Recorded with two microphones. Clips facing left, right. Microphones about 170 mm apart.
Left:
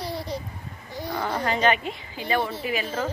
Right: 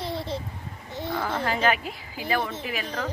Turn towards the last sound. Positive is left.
turn(degrees=0)  # may be behind; listen again after turning